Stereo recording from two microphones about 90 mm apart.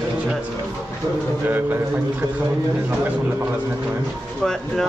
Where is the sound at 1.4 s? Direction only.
20° right (ahead or behind).